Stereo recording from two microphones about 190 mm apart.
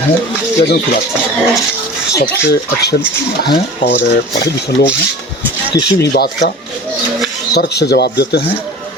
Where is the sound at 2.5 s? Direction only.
60° left (ahead or behind).